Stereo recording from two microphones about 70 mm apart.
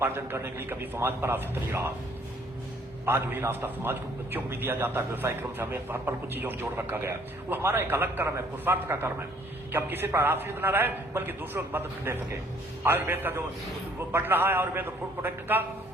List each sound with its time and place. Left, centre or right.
0.0 s a man's voice: right
3.1 s a man's voice: right